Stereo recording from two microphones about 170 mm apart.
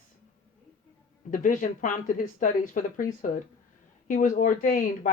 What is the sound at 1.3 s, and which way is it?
A woman's voice, 50° left (ahead or behind).